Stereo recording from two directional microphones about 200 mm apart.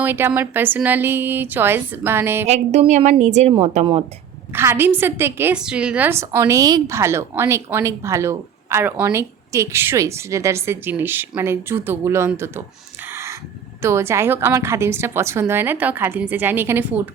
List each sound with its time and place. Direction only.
0.0 s a woman's voice: 10° right (ahead or behind)
2.5 s a woman's voice: 35° right (ahead or behind)
4.5 s a woman's voice: 10° right (ahead or behind)
13.1 s crow: 15° right (ahead or behind)
13.8 s a woman's voice: 15° right (ahead or behind)